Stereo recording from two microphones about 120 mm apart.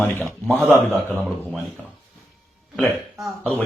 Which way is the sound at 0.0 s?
15° left (ahead or behind).